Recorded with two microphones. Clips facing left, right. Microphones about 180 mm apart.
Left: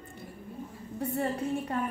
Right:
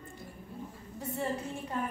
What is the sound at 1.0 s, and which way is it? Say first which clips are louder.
Speech: left 6 dB; 60° left (ahead or behind).